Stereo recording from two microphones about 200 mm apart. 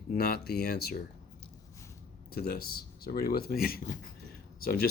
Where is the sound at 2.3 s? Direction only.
50° left (ahead or behind).